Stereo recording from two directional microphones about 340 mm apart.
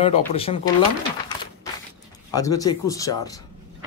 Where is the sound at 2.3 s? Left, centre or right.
Centre.